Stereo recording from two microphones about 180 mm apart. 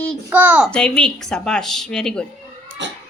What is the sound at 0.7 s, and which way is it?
Speech, 5° left (ahead or behind).